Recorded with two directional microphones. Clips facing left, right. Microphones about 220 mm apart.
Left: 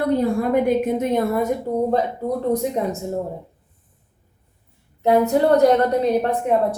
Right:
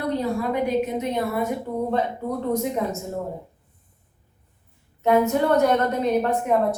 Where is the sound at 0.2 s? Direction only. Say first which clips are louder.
Left 5 dB; 50° left (ahead or behind).